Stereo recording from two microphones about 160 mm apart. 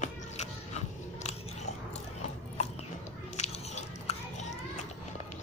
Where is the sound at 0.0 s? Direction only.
45° left (ahead or behind).